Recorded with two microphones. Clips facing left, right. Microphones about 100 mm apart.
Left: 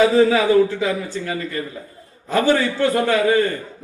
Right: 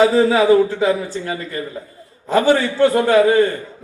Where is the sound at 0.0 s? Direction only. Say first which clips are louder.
Right 1 dB; 35° right (ahead or behind).